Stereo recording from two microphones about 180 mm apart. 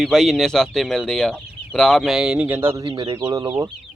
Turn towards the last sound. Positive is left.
turn(degrees=-15)  # may be behind; listen again after turning